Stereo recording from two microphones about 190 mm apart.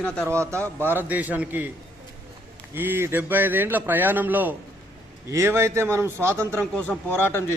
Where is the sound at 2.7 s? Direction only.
10° right (ahead or behind).